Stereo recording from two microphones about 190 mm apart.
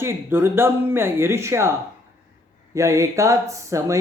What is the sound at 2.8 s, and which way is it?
Speech, 15° right (ahead or behind).